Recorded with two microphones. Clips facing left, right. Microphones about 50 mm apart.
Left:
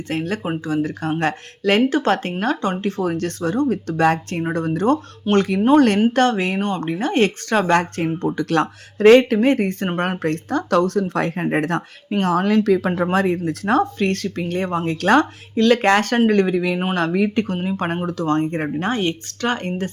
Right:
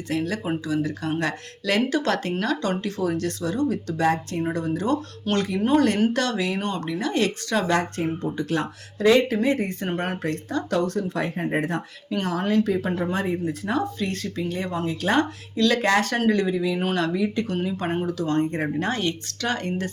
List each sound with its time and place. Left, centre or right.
0.1 s speech: left
5.3 s speech: centre
5.7 s speech: left
6.1 s speech: left
13.0 s speech: left
14.0 s speech: left
14.8 s speech: left
15.5 s speech: left
17.4 s speech: left
18.9 s speech: left